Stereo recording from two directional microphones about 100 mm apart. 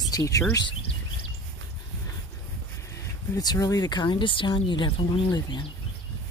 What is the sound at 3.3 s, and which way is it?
Speech, 40° left (ahead or behind).